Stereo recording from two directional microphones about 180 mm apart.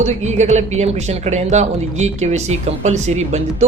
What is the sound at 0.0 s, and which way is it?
Speech, 40° right (ahead or behind).